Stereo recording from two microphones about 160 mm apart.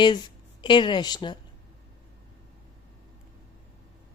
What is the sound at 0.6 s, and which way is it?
Speech, 30° left (ahead or behind).